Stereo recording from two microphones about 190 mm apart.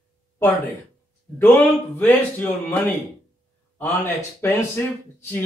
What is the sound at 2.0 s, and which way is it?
Speech, 10° left (ahead or behind).